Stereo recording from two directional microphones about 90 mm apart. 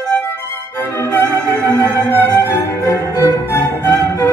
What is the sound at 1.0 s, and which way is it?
Violin, 25° left (ahead or behind).